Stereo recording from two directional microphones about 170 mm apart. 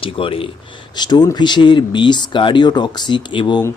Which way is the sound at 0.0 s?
30° left (ahead or behind).